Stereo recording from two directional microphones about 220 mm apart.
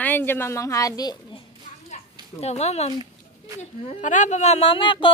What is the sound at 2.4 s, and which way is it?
Speech, 30° left (ahead or behind).